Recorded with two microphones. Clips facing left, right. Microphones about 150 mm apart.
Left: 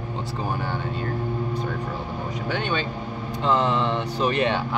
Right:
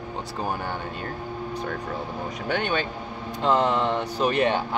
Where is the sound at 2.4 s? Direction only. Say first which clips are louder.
Right 1 dB; 50° right (ahead or behind).